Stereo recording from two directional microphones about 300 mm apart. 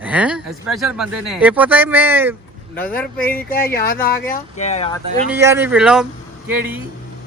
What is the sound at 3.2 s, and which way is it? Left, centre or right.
Speech, left.